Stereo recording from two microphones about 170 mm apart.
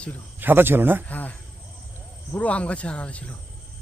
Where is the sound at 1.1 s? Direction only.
10° left (ahead or behind).